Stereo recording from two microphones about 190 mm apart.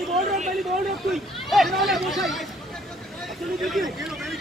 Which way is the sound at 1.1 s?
Centre (ahead or behind).